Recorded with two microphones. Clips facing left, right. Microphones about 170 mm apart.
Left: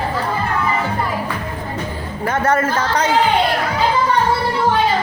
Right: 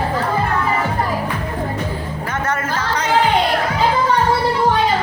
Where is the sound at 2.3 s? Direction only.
30° left (ahead or behind).